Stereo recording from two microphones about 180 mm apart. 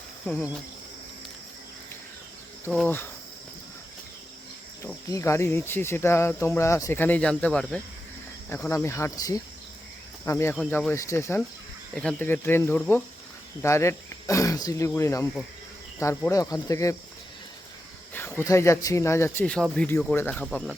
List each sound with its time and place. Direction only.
0.3 s speech: 10° left (ahead or behind)
2.8 s speech: 10° left (ahead or behind)
5.0 s speech: 15° left (ahead or behind)
18.1 s speech: 10° left (ahead or behind)